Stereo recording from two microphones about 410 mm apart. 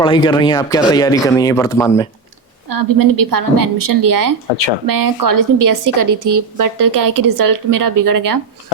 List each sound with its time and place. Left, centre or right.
0.0 s speech: centre
2.6 s speech: right